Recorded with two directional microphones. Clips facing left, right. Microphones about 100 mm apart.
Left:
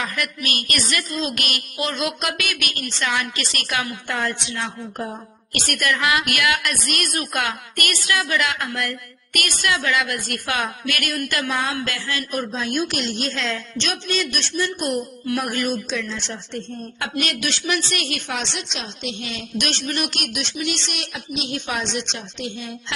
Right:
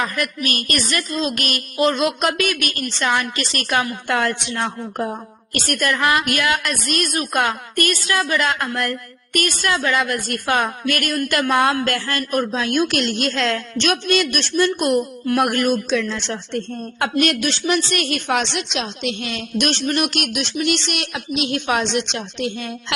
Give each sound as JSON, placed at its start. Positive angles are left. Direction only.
{"t": 0.0, "sound": "a woman's voice", "side_deg": -40}
{"t": 4.1, "sound": "a woman's voice", "side_deg": -65}
{"t": 5.5, "sound": "a woman's voice", "side_deg": -35}
{"t": 17.0, "sound": "a woman's voice", "side_deg": -50}